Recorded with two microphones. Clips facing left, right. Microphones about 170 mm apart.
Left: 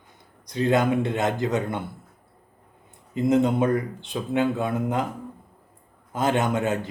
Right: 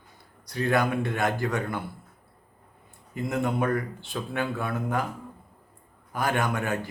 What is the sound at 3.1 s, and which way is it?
A man's voice, 20° left (ahead or behind).